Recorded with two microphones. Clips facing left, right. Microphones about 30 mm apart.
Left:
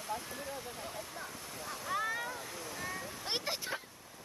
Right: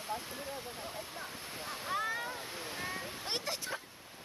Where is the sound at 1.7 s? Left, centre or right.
Right.